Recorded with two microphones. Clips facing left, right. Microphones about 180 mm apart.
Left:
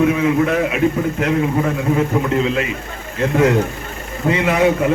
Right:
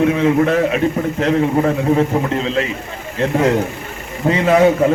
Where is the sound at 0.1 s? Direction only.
35° right (ahead or behind).